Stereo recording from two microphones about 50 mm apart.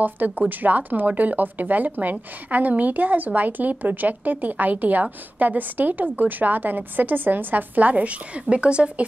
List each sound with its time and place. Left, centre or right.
0.0 s speech: right